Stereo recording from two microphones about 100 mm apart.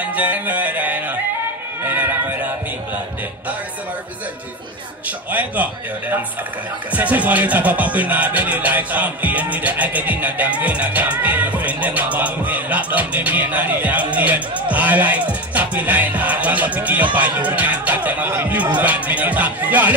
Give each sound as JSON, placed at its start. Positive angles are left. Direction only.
{"t": 0.0, "sound": "music", "side_deg": -15}
{"t": 5.0, "sound": "speech", "side_deg": -15}